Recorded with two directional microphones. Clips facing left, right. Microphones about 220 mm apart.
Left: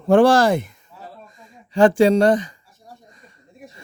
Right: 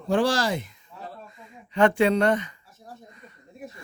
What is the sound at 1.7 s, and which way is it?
Speech, 35° left (ahead or behind).